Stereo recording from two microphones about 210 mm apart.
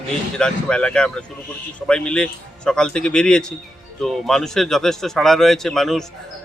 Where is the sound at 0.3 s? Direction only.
5° left (ahead or behind).